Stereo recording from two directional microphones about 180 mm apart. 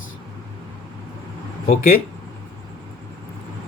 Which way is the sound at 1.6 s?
55° left (ahead or behind).